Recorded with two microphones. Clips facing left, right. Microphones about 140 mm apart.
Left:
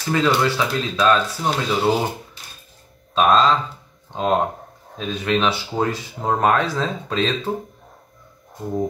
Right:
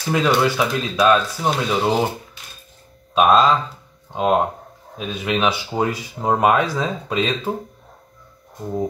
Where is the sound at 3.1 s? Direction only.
10° right (ahead or behind).